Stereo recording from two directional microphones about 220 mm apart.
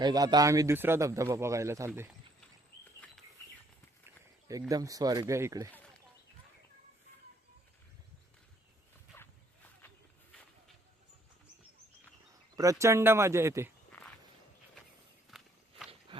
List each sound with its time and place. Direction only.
0.0 s a man's voice: 20° right (ahead or behind)
4.7 s a man's voice: 15° right (ahead or behind)
12.5 s a man's voice: 15° right (ahead or behind)
15.3 s walk: centre (ahead or behind)